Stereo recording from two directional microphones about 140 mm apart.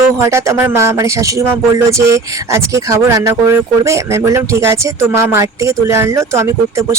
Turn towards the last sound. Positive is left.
turn(degrees=-20)  # may be behind; listen again after turning